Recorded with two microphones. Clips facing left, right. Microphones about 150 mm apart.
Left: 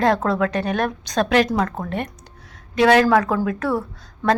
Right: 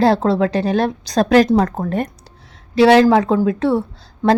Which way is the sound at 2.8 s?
30° right (ahead or behind).